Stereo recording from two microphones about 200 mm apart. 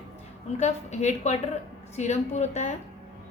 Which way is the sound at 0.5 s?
35° left (ahead or behind).